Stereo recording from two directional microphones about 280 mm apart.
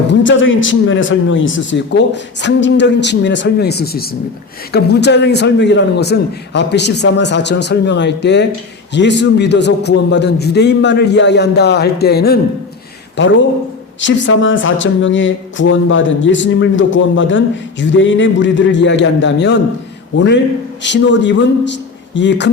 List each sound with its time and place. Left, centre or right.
0.1 s speech: left
14.0 s speech: left